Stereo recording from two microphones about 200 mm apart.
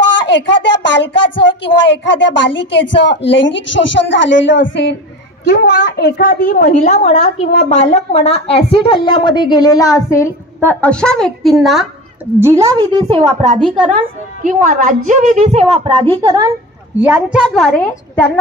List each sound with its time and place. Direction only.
0.2 s a woman's voice: 65° left (ahead or behind); by 11.8 s centre (ahead or behind)
12.4 s a woman's voice: 15° right (ahead or behind)
17.0 s a woman's voice: 5° right (ahead or behind)
18.1 s speech: 10° left (ahead or behind)